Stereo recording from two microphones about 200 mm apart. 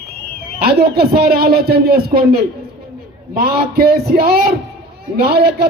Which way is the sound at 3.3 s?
50° right (ahead or behind).